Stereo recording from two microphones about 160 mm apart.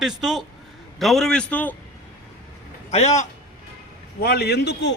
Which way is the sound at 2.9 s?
45° left (ahead or behind).